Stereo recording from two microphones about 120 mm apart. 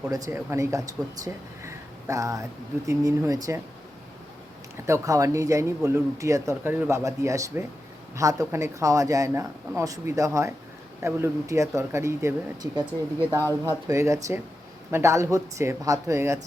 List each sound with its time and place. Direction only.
0.1 s speech: 25° right (ahead or behind)
4.9 s speech: 30° right (ahead or behind)
13.3 s speech: 25° right (ahead or behind)